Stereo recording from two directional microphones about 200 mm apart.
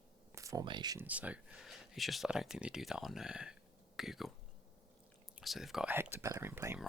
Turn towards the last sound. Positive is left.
turn(degrees=-10)  # may be behind; listen again after turning